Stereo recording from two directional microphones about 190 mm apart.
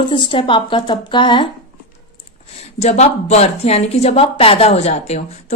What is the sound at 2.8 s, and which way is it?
Speech, 35° left (ahead or behind).